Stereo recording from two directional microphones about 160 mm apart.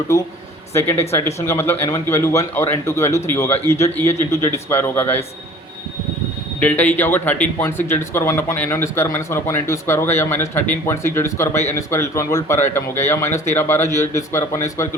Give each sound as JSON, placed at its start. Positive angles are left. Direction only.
{"t": 0.7, "sound": "speech", "side_deg": 15}
{"t": 6.6, "sound": "speech", "side_deg": 10}